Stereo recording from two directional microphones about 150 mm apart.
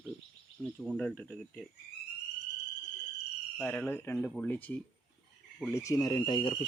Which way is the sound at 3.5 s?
5° left (ahead or behind).